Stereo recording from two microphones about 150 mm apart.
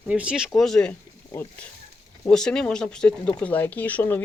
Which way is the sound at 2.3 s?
5° left (ahead or behind).